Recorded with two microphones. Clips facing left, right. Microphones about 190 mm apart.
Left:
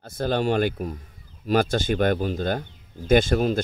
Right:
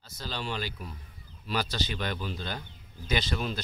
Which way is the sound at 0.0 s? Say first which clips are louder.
Left 14 dB; 55° left (ahead or behind).